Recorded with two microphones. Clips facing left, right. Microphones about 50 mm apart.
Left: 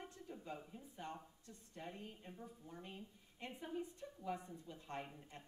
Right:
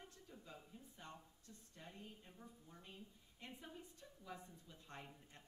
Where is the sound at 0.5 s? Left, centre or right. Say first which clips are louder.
Left 7 dB; left.